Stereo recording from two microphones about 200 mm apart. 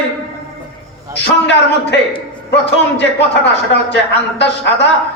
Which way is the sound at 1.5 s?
60° left (ahead or behind).